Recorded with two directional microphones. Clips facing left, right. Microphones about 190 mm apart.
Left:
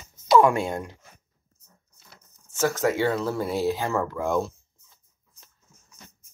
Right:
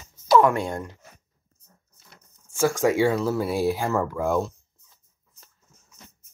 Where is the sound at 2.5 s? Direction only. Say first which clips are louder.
Right 3 dB; 15° right (ahead or behind).